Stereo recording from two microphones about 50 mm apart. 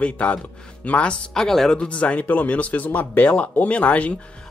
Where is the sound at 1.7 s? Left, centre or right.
Left.